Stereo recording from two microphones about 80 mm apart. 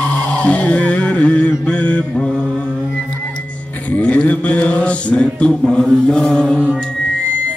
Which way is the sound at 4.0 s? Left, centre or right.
Centre.